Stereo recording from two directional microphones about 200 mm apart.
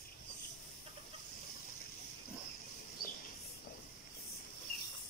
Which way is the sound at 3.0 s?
45° left (ahead or behind).